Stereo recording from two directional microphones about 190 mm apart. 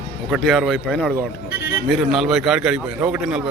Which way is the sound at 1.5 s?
55° left (ahead or behind).